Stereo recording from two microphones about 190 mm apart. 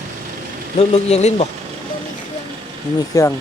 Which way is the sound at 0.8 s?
35° left (ahead or behind).